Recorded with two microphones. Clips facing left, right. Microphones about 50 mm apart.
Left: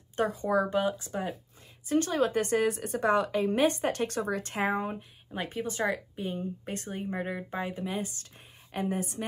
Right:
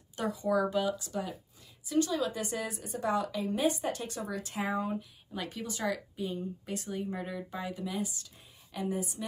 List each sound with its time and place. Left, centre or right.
0.1 s speech: left
1.9 s a woman's voice: left